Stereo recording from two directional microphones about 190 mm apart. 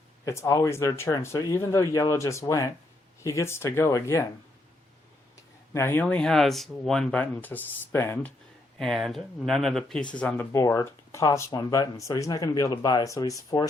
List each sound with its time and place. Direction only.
0.3 s speech: 15° left (ahead or behind)
5.7 s speech: 10° left (ahead or behind)
8.8 s speech: centre (ahead or behind); by 13.7 s 20° left (ahead or behind)